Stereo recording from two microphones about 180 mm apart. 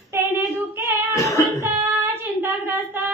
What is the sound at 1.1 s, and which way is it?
Beatboxing, 15° left (ahead or behind).